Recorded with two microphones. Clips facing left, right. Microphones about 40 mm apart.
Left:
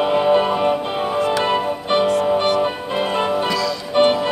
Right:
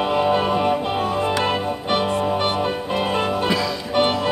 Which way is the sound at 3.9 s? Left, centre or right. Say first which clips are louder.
Left 5 dB; centre.